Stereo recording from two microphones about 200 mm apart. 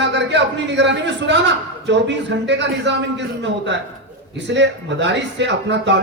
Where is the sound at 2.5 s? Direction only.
60° right (ahead or behind).